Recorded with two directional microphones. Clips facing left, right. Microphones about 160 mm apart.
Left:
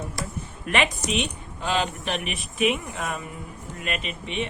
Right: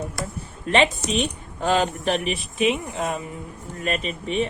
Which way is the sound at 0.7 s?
30° right (ahead or behind).